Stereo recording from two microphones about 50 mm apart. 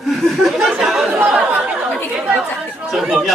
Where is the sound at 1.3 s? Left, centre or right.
Centre.